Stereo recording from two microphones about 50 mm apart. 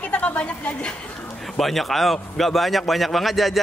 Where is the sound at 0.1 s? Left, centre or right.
Left.